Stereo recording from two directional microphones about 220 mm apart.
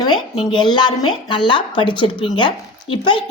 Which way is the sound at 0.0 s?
20° left (ahead or behind).